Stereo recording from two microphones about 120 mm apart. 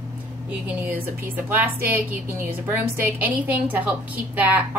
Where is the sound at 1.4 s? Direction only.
15° right (ahead or behind).